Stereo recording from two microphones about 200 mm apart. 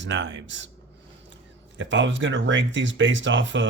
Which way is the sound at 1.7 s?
65° right (ahead or behind).